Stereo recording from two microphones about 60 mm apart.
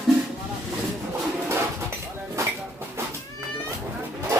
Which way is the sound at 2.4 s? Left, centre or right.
Right.